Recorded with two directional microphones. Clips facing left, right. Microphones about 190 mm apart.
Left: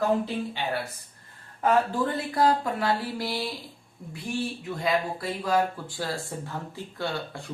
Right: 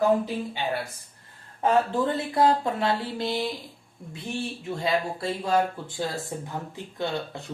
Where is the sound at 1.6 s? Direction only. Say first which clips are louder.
Right 1 dB; 25° right (ahead or behind).